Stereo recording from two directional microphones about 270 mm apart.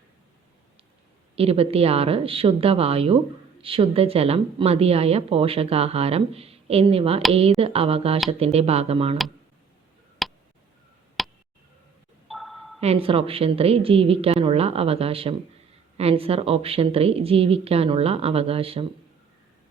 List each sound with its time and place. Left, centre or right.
1.4 s a woman's voice: right
10.2 s tick: centre
12.3 s a sound: centre
12.8 s a woman's voice: right